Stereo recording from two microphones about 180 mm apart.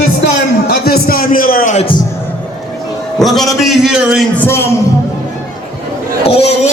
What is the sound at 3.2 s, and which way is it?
A man's voice, centre (ahead or behind).